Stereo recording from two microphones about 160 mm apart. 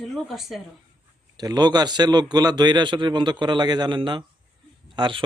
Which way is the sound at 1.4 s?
25° right (ahead or behind).